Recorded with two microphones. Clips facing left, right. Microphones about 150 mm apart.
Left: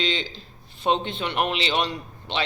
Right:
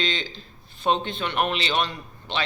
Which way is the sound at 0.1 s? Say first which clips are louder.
Left 2 dB; 30° left (ahead or behind).